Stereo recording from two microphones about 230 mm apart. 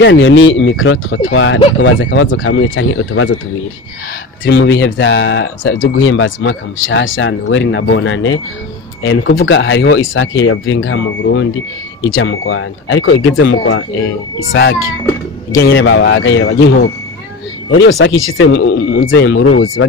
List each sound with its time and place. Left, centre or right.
0.0 s speech: left
4.5 s speech: left